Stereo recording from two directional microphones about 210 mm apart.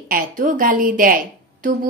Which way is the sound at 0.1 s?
40° right (ahead or behind).